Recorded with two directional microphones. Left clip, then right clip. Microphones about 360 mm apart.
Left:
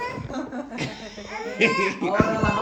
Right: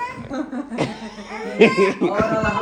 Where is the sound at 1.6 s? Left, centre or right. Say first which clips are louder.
Right 7 dB; centre.